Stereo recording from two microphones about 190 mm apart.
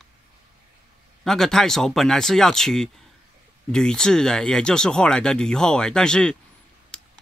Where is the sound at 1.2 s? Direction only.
Centre (ahead or behind).